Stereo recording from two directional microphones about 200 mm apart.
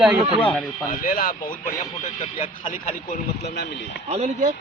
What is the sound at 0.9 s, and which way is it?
Speech, 45° left (ahead or behind).